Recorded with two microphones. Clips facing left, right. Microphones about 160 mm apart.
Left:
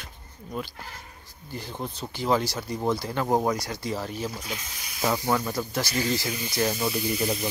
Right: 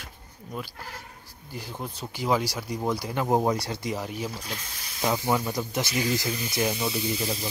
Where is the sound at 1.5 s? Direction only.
10° right (ahead or behind).